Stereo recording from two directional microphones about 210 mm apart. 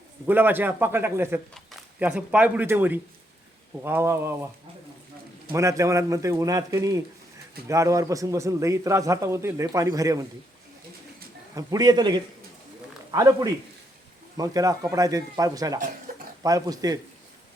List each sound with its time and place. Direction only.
0.3 s a man's voice: 10° right (ahead or behind)
5.5 s a man's voice: 15° right (ahead or behind)
11.5 s a man's voice: 15° right (ahead or behind)